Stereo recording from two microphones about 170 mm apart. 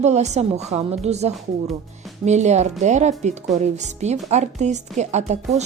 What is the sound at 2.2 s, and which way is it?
A woman's voice, 40° right (ahead or behind).